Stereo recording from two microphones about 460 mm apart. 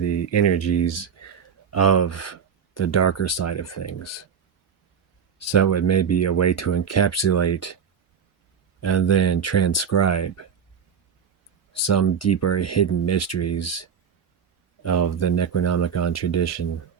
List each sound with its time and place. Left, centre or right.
0.0 s speech: left
5.4 s speech: left
8.8 s speech: left
11.7 s speech: left